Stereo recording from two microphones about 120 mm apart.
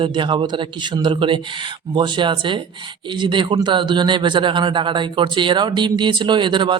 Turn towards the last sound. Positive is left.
turn(degrees=-40)  # may be behind; listen again after turning